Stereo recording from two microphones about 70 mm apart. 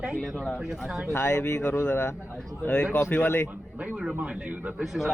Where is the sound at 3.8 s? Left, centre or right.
Centre.